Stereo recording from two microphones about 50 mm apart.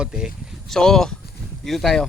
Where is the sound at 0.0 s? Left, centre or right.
Centre.